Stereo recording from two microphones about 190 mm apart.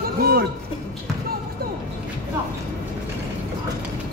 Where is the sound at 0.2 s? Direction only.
55° right (ahead or behind).